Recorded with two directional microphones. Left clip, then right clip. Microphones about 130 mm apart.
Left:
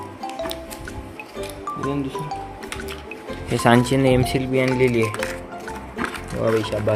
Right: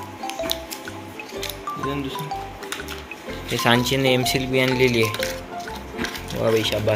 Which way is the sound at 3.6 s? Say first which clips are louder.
Left 2 dB; 50° left (ahead or behind).